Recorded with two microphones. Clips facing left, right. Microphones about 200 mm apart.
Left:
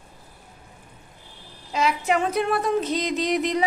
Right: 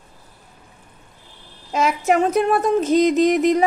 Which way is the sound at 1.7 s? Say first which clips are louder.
Right 4 dB; 45° right (ahead or behind).